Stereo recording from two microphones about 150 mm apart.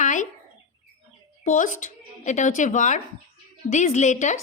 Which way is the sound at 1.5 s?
60° left (ahead or behind).